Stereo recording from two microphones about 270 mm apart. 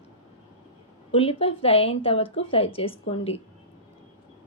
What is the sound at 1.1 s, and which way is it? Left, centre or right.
A woman's voice, left.